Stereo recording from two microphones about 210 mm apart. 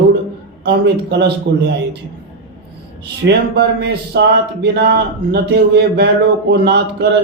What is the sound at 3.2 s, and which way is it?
Speech, 55° right (ahead or behind).